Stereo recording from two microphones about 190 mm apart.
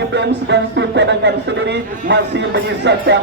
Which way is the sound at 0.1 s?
65° right (ahead or behind).